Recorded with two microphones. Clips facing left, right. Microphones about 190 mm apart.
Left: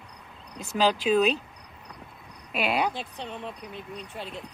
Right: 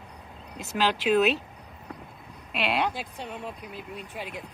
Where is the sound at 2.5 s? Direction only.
Centre (ahead or behind).